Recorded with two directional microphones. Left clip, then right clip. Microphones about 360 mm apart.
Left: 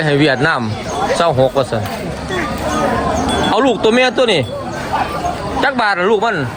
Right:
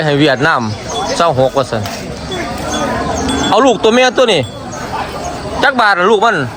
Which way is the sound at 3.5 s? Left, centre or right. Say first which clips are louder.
Right 5 dB; centre.